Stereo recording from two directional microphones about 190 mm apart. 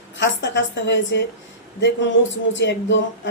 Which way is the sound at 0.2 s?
70° left (ahead or behind).